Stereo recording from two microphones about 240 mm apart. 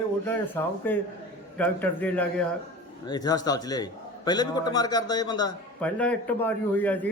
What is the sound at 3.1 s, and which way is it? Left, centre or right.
A man's voice, centre.